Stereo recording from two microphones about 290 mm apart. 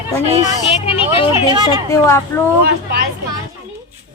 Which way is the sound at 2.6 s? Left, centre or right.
Right.